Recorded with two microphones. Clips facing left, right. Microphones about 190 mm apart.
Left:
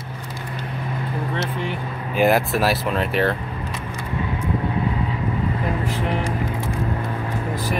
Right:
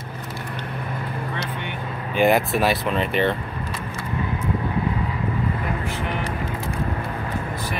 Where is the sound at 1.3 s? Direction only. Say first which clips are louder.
Left 4 dB; 35° left (ahead or behind).